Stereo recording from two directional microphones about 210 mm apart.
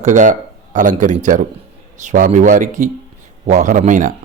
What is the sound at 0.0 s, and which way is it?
A man's voice, 35° right (ahead or behind).